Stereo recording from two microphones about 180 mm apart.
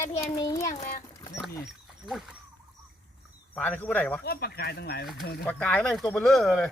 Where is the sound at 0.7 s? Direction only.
45° left (ahead or behind).